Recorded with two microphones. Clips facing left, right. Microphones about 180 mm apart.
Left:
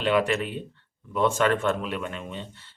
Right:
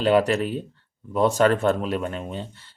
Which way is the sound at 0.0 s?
35° right (ahead or behind).